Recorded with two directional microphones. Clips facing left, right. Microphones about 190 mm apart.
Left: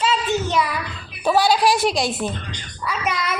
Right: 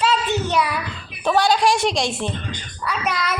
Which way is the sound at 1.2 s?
5° left (ahead or behind).